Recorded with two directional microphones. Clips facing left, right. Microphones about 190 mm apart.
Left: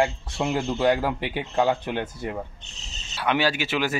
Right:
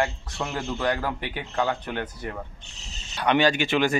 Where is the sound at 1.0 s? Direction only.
15° left (ahead or behind).